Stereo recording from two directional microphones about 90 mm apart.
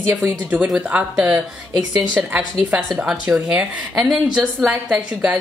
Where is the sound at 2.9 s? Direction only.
10° right (ahead or behind).